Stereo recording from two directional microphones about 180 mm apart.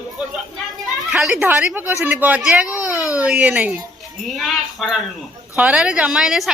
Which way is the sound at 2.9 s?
15° left (ahead or behind).